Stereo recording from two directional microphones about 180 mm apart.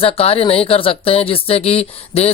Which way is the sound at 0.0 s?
35° left (ahead or behind).